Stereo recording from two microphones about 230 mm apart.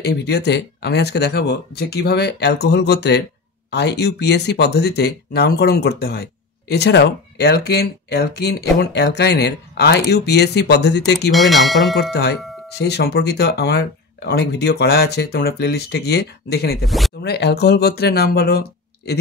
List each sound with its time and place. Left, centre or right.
0.0 s speech: left
11.3 s bell: centre
12.1 s speech: left
16.8 s speech: centre
17.2 s speech: left